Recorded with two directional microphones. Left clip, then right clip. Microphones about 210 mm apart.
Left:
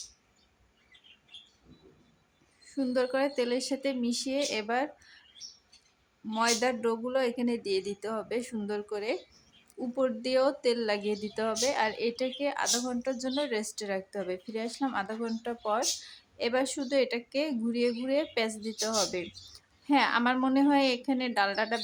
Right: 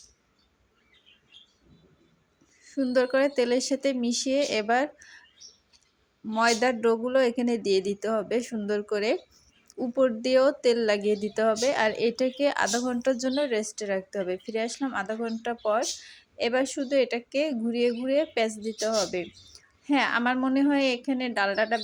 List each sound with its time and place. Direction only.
2.6 s speech: 15° right (ahead or behind)
6.2 s speech: 15° right (ahead or behind)